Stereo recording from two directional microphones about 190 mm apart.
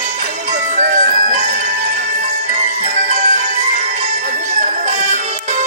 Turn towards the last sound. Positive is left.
turn(degrees=-35)  # may be behind; listen again after turning